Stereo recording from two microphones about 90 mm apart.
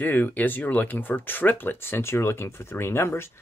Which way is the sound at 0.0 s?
20° left (ahead or behind).